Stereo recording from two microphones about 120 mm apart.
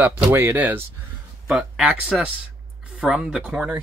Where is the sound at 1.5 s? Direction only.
5° right (ahead or behind).